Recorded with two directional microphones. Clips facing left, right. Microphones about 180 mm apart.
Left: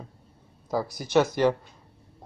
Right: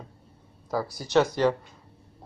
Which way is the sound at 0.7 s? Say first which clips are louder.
Left 1 dB; 20° left (ahead or behind).